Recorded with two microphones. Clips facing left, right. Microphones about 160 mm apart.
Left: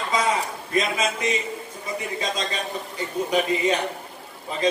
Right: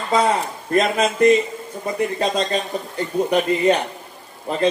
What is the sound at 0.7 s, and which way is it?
A man's voice, 55° right (ahead or behind).